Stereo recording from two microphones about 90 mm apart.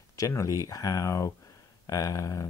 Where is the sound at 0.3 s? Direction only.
35° left (ahead or behind).